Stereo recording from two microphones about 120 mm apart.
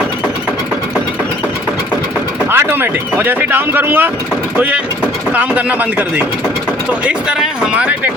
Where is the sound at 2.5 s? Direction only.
20° right (ahead or behind).